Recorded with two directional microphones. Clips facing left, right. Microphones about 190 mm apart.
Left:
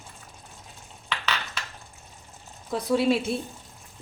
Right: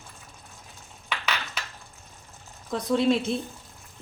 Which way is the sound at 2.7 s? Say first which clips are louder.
Even; 5° left (ahead or behind).